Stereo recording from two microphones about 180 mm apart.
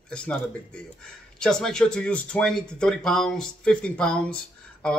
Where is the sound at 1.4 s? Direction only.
5° left (ahead or behind).